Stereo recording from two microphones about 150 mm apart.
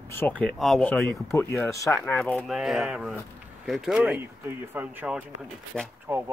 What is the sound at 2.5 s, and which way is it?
Speech, centre (ahead or behind).